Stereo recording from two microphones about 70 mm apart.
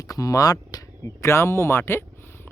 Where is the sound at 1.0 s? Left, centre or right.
Left.